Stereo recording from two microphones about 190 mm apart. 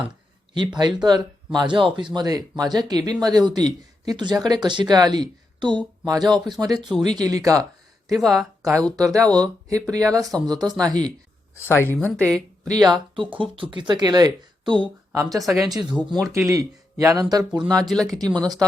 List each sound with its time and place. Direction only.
1.0 s speech: 20° right (ahead or behind)
6.2 s speech: centre (ahead or behind)
7.0 s speech: 20° right (ahead or behind)
8.0 s speech: centre (ahead or behind)
8.7 s speech: 20° right (ahead or behind)
11.7 s a woman's voice: 10° left (ahead or behind)
12.3 s speech: 20° right (ahead or behind)
17.7 s speech: 5° left (ahead or behind)